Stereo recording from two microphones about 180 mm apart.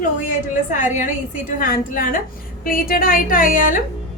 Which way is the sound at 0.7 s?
45° left (ahead or behind).